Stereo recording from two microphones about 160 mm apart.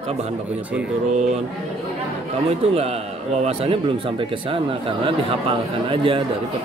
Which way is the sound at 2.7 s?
40° right (ahead or behind).